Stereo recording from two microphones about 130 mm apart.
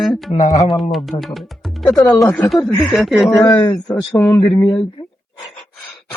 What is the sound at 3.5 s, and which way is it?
Speech, 15° left (ahead or behind).